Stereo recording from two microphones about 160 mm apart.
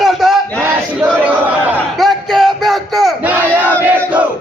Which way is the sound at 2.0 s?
Centre (ahead or behind).